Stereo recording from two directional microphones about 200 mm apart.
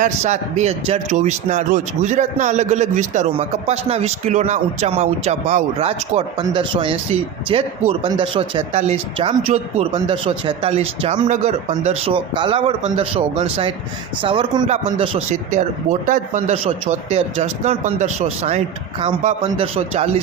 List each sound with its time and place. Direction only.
0.0 s a man's voice: 35° right (ahead or behind)